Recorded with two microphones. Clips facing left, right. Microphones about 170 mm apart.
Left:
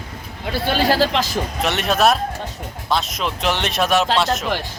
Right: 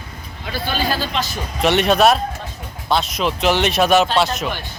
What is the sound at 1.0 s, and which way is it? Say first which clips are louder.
Speech: left 5 dB; 90° left.